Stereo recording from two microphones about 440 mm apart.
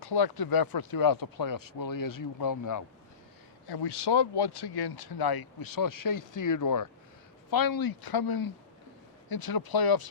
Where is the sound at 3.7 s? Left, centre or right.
Left.